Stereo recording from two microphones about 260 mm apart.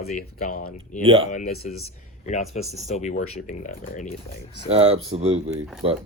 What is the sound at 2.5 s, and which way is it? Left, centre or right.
Speech, left.